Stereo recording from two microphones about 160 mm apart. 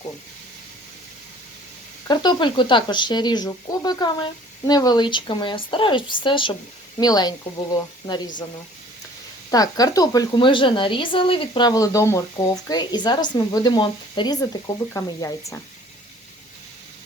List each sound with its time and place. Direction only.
2.0 s speech: 30° left (ahead or behind)
9.5 s speech: 25° left (ahead or behind)